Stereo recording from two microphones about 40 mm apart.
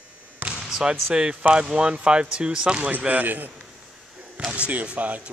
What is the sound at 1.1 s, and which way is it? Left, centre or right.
Speech, right.